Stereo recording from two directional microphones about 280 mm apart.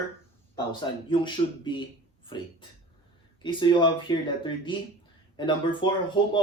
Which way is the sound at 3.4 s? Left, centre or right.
Centre.